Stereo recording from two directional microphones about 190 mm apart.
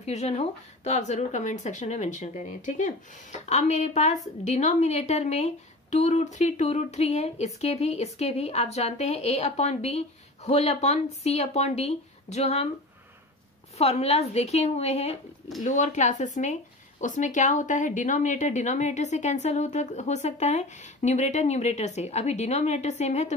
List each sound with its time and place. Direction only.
0.0 s speech: 35° left (ahead or behind)
13.7 s speech: 35° left (ahead or behind)